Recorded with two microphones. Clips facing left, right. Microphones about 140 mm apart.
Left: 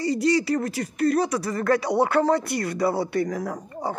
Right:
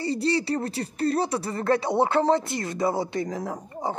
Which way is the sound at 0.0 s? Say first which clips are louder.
Left 3 dB; 30° right (ahead or behind).